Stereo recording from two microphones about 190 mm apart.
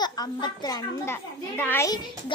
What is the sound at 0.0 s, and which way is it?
A child's voice, 20° left (ahead or behind).